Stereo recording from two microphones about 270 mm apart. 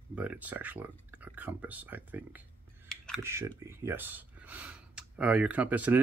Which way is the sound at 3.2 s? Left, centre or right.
Centre.